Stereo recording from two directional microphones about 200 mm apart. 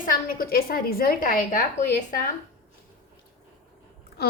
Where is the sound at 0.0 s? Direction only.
45° left (ahead or behind).